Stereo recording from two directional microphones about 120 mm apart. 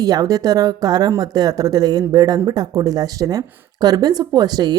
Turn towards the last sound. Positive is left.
turn(degrees=-35)  # may be behind; listen again after turning